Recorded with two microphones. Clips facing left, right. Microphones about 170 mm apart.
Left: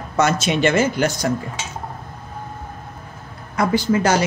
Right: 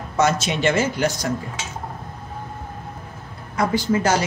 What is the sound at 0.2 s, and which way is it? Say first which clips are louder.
Speech: left 2 dB; 55° left (ahead or behind).